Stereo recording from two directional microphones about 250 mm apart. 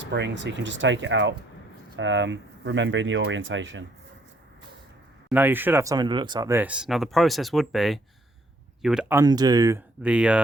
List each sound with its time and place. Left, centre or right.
0.0 s speech: right
5.3 s speech: centre